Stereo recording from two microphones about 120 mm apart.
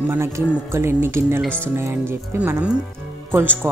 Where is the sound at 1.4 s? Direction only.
10° left (ahead or behind).